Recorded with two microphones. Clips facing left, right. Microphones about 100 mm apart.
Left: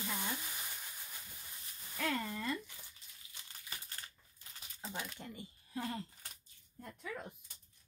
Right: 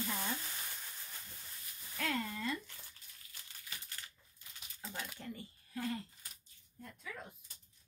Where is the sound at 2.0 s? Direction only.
5° left (ahead or behind).